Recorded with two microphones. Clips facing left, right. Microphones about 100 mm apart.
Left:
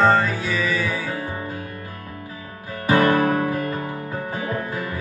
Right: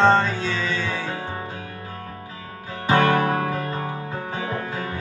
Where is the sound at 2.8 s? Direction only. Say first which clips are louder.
Left 1 dB; 30° right (ahead or behind).